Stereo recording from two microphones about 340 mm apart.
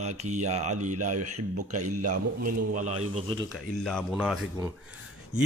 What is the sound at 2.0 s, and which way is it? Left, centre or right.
Speech, right.